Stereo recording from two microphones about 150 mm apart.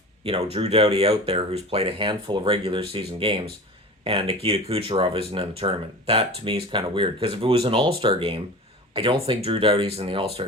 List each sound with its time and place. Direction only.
0.5 s speech: 40° right (ahead or behind)